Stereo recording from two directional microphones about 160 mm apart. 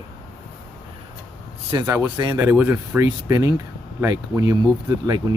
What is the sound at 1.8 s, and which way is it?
Speech, 10° right (ahead or behind).